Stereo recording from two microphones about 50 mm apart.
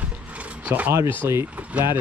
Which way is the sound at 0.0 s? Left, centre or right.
Right.